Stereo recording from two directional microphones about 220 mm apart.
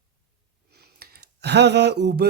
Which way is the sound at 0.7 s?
45° right (ahead or behind).